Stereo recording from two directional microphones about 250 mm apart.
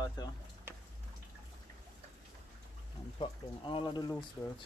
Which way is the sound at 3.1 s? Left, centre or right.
Centre.